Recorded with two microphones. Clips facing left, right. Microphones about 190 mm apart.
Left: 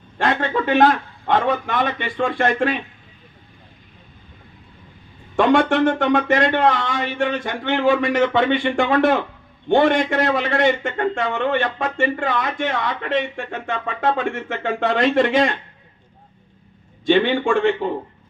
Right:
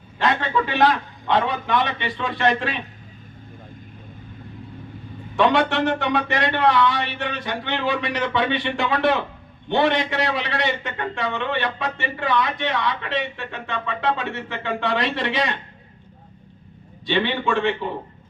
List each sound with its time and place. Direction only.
0.2 s a man's voice: 50° left (ahead or behind)
5.4 s a man's voice: 50° left (ahead or behind)
17.1 s a man's voice: 50° left (ahead or behind)